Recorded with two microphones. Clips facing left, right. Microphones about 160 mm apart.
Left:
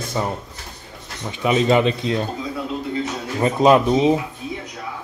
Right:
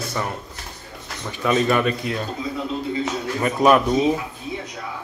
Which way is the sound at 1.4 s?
20° left (ahead or behind).